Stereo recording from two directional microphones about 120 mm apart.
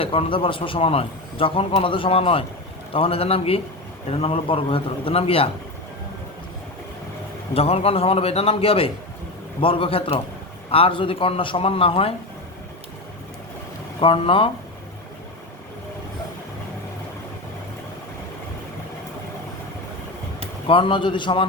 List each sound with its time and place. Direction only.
0.0 s a man's voice: 50° left (ahead or behind)
7.5 s a man's voice: 55° left (ahead or behind)
14.0 s a man's voice: 45° left (ahead or behind)
20.7 s a man's voice: 45° left (ahead or behind)